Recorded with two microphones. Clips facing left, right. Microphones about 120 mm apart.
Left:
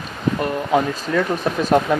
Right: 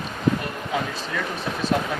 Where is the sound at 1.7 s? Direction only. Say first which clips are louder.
Left 9 dB; 55° left (ahead or behind).